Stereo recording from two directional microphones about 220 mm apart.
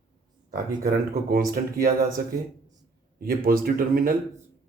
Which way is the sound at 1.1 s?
40° right (ahead or behind).